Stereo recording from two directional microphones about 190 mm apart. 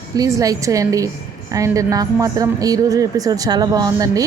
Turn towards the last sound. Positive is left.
turn(degrees=-20)  # may be behind; listen again after turning